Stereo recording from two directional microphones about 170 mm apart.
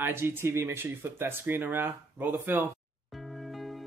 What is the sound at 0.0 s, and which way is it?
Speech, 15° right (ahead or behind).